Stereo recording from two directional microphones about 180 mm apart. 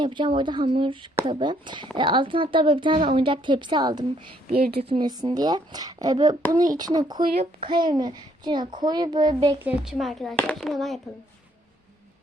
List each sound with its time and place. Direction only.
0.0 s a woman's voice: 25° right (ahead or behind)
9.6 s speech: centre (ahead or behind)